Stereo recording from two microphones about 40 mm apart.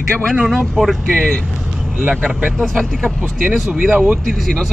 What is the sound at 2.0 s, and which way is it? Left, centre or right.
Speech, centre.